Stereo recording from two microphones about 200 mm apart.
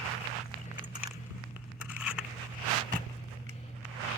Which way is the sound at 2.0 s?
5° right (ahead or behind).